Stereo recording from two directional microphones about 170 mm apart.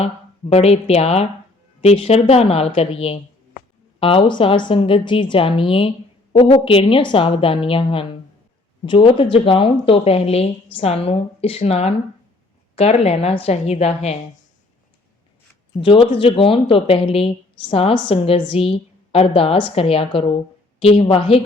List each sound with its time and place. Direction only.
0.5 s speech: 40° left (ahead or behind)
15.8 s speech: 30° left (ahead or behind)